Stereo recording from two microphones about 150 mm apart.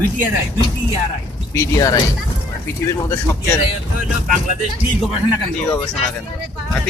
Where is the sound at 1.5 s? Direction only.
20° left (ahead or behind).